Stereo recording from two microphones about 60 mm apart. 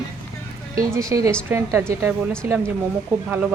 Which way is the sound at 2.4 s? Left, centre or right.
Right.